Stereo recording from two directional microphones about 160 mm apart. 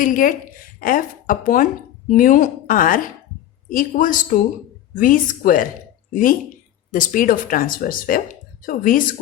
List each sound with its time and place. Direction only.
0.0 s speech: 55° left (ahead or behind)
6.9 s speech: 55° left (ahead or behind)